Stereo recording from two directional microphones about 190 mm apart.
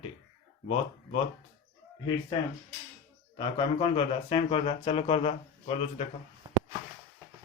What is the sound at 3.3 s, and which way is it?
Speech, 30° left (ahead or behind).